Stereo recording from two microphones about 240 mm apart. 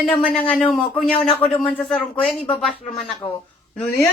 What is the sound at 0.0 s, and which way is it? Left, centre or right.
A woman's voice, centre.